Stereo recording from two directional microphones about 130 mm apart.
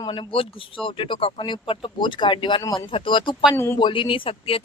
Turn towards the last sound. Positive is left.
turn(degrees=45)  # may be behind; listen again after turning